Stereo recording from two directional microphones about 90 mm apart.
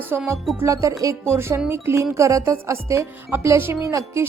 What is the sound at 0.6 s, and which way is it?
A woman's voice, 35° right (ahead or behind).